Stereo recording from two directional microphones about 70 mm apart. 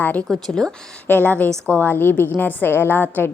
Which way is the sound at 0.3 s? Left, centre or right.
Centre.